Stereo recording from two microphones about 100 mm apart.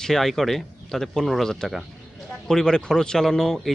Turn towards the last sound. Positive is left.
turn(degrees=5)  # may be behind; listen again after turning